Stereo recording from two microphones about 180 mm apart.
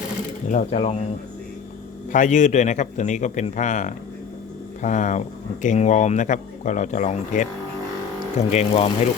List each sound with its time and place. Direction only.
0.4 s speech: 45° left (ahead or behind)
2.1 s a man's voice: 45° left (ahead or behind)